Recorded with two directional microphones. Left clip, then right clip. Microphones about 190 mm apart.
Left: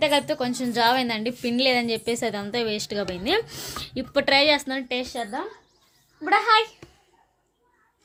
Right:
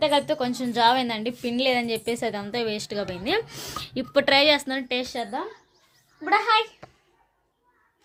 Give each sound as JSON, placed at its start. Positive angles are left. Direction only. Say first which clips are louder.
{"t": 0.0, "sound": "a woman's voice", "louder": "even", "side_deg": 0}
{"t": 6.2, "sound": "a child's voice", "louder": "left 2 dB", "side_deg": 25}